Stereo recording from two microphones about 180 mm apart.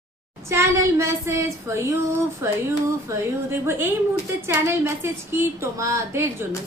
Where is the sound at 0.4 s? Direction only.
15° right (ahead or behind).